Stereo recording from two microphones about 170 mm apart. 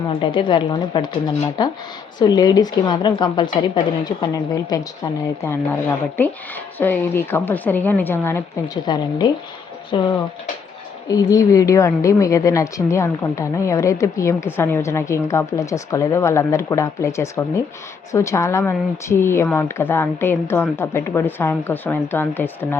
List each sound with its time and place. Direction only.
0.1 s a woman's voice: 30° left (ahead or behind)
5.4 s a woman's voice: 15° left (ahead or behind)
8.9 s a woman's voice: 25° left (ahead or behind)
11.1 s a woman's voice: 20° left (ahead or behind)